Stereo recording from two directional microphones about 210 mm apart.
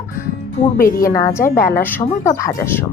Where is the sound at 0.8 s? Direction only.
40° left (ahead or behind).